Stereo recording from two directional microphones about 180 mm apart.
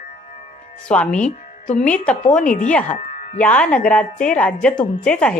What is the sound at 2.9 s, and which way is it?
Music, 40° left (ahead or behind).